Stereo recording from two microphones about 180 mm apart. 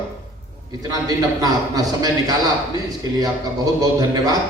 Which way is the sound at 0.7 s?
20° right (ahead or behind).